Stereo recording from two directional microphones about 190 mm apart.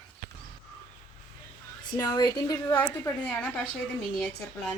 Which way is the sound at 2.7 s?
5° left (ahead or behind).